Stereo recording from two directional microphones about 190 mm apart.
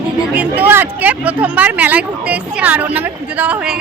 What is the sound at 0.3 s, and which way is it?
Speech, 10° right (ahead or behind).